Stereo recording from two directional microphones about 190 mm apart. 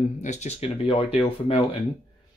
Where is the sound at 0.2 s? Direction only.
35° left (ahead or behind).